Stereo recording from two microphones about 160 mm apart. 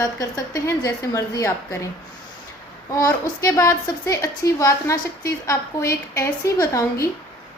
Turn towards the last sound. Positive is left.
turn(degrees=20)  # may be behind; listen again after turning